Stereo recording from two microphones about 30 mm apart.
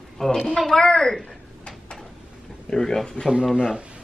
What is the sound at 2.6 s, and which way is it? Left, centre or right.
Speech, left.